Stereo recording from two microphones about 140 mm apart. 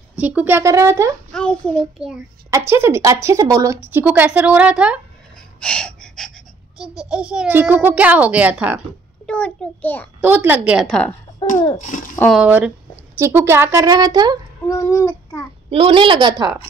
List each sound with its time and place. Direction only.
0.1 s a woman's voice: 10° right (ahead or behind)
2.0 s a child's voice: 5° right (ahead or behind)
2.5 s a woman's voice: 20° right (ahead or behind)
5.6 s gasp: 5° left (ahead or behind)
7.0 s a woman's voice: 5° right (ahead or behind)
9.2 s a child's voice: 10° left (ahead or behind)
10.2 s a woman's voice: 10° right (ahead or behind)
10.9 s a child's voice: 5° left (ahead or behind)
11.5 s a sound: 25° left (ahead or behind)
12.3 s a woman's voice: 10° right (ahead or behind)
13.8 s a woman's voice: 30° right (ahead or behind)
14.7 s a sound: 25° left (ahead or behind)
15.7 s a woman's voice: 40° right (ahead or behind)